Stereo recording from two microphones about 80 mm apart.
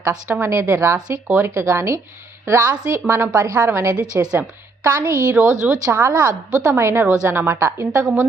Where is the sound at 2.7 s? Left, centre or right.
Right.